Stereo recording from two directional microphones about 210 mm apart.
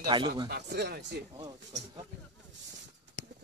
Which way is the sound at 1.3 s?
20° right (ahead or behind).